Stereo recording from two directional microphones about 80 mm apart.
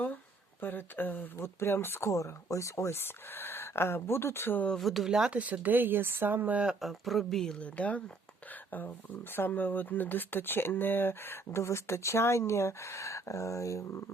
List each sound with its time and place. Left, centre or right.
0.6 s speech: left
4.7 s speech: centre
5.4 s speech: centre
6.8 s speech: centre
7.6 s speech: centre
9.3 s speech: left